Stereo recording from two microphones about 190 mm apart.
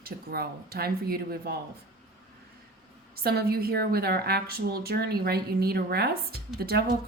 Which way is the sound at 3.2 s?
55° right (ahead or behind).